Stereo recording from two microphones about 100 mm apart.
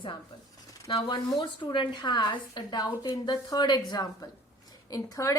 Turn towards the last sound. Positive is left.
turn(degrees=35)  # may be behind; listen again after turning